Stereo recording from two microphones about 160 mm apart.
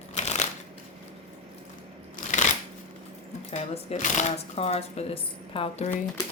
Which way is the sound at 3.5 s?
40° left (ahead or behind).